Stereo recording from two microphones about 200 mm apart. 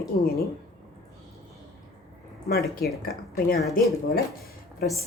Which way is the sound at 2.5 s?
50° left (ahead or behind).